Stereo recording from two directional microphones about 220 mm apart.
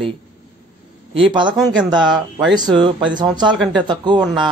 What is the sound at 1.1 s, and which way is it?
A man's voice, 20° right (ahead or behind).